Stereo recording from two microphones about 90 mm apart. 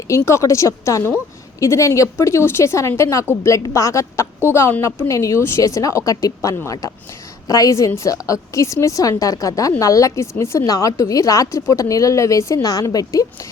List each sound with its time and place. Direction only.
0.1 s a woman's voice: 35° left (ahead or behind)